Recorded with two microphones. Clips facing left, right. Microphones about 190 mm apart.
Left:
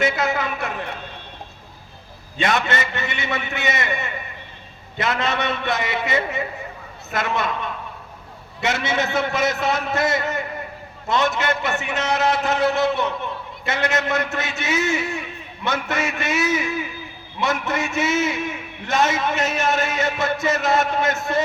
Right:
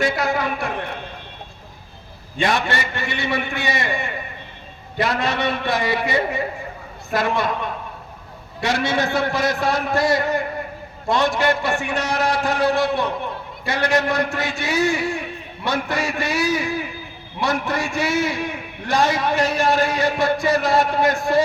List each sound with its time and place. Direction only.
0.0 s a sound: 20° left (ahead or behind)
2.4 s a man's voice: 20° left (ahead or behind)
8.6 s a man's voice: 20° left (ahead or behind)